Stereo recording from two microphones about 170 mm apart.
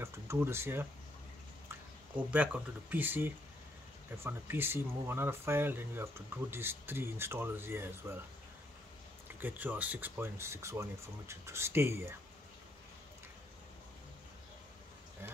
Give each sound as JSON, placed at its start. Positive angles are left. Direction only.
{"t": 0.0, "sound": "speech", "side_deg": -15}
{"t": 2.1, "sound": "speech", "side_deg": -10}
{"t": 9.4, "sound": "speech", "side_deg": -10}